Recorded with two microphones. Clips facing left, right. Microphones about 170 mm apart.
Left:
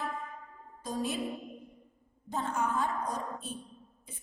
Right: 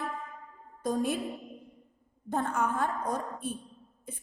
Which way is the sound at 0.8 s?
55° right (ahead or behind).